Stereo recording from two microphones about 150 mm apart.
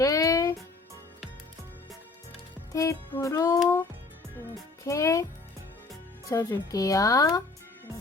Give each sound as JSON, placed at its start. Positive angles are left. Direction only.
{"t": 0.0, "sound": "music", "side_deg": 20}
{"t": 2.7, "sound": "speech", "side_deg": 20}
{"t": 4.8, "sound": "speech", "side_deg": 20}
{"t": 6.2, "sound": "speech", "side_deg": 20}